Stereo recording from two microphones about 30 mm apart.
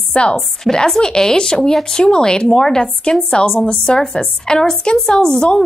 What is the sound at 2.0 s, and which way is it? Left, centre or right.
A woman's voice, left.